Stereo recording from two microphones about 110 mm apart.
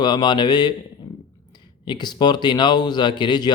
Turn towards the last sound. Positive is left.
turn(degrees=40)  # may be behind; listen again after turning